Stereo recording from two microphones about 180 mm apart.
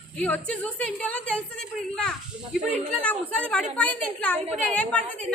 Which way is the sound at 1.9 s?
5° left (ahead or behind).